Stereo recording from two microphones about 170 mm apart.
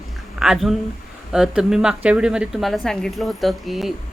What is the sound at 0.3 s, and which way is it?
A woman's voice, 5° right (ahead or behind).